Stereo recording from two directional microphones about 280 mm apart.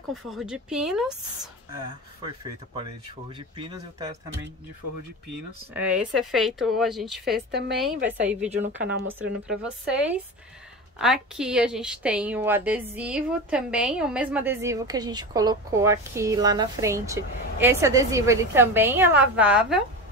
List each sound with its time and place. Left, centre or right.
0.1 s speech: centre
2.2 s a woman's voice: centre
5.7 s a woman's voice: centre